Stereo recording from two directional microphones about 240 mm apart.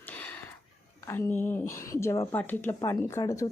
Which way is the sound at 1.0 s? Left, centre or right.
Centre.